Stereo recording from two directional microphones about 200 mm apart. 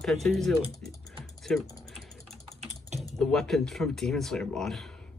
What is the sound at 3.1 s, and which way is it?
Speech, centre (ahead or behind).